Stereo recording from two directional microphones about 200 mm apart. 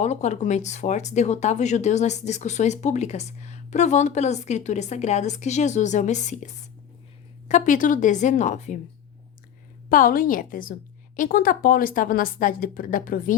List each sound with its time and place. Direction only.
0.0 s speech: 35° left (ahead or behind)
9.9 s a woman's voice: 45° left (ahead or behind)